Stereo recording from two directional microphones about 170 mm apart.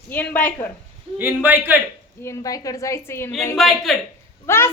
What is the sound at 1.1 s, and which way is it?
Speech, 10° right (ahead or behind).